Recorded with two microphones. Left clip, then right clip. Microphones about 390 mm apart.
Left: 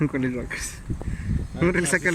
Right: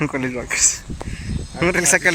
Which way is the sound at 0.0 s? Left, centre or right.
Centre.